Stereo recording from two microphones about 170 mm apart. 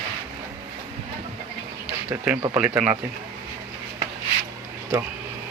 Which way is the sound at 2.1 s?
10° right (ahead or behind).